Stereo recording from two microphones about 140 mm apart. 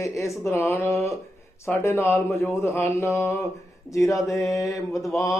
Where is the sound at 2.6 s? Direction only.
20° left (ahead or behind).